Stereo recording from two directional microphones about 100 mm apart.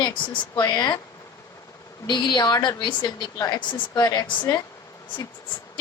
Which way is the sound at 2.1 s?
50° left (ahead or behind).